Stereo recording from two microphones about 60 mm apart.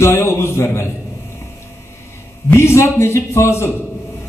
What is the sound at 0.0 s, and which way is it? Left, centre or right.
Speech, left.